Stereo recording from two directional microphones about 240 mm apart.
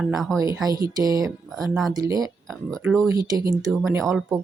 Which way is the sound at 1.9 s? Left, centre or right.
Centre.